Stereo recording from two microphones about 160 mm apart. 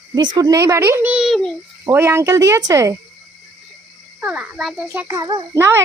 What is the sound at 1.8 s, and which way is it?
Speech, 15° right (ahead or behind).